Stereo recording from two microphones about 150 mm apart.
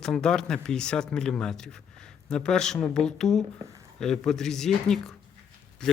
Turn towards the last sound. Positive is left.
turn(degrees=5)  # may be behind; listen again after turning